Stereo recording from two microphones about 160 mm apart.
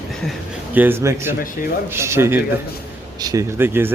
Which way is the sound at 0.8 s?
15° right (ahead or behind).